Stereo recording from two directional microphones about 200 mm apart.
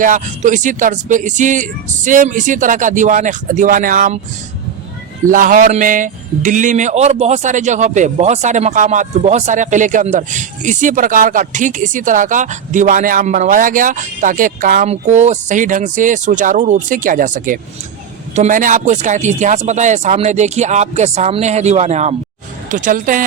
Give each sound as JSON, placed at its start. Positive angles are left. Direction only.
{"t": 0.0, "sound": "a man's voice", "side_deg": -40}
{"t": 5.2, "sound": "a man's voice", "side_deg": -45}